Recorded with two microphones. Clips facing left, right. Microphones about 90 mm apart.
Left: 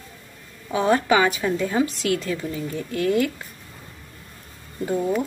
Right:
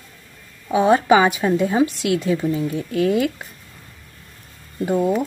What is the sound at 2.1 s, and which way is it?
Speech, 15° right (ahead or behind).